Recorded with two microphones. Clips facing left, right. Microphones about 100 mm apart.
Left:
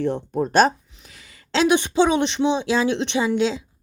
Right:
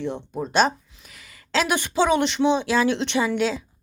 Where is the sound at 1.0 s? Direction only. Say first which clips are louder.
Left 2 dB; 30° left (ahead or behind).